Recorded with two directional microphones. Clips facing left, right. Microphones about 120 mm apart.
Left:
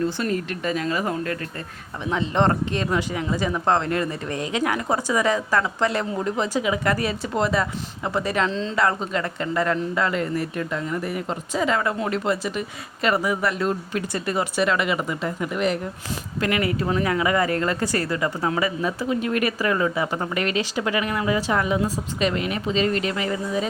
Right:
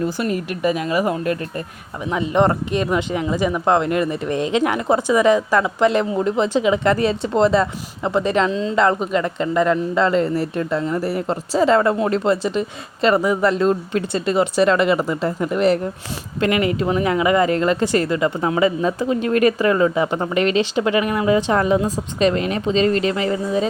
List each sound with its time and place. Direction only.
0.0 s speech: 15° right (ahead or behind)
8.4 s speech: 10° right (ahead or behind)
8.7 s speech: 20° right (ahead or behind)
16.4 s speech: 20° right (ahead or behind)